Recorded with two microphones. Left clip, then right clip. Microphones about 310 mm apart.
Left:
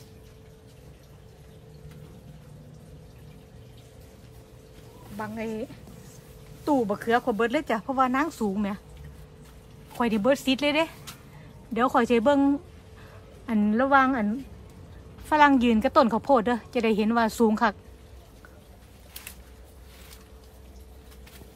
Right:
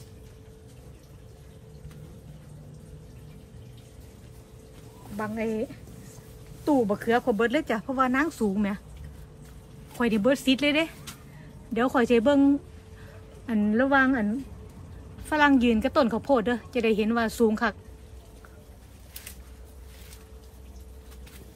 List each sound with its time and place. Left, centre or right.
5.1 s speech: centre
6.9 s speech: centre
9.9 s a woman's voice: centre